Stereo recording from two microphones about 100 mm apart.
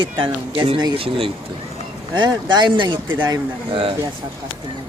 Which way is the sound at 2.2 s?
50° right (ahead or behind).